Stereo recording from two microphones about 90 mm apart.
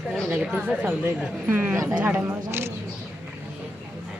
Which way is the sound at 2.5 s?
30° right (ahead or behind).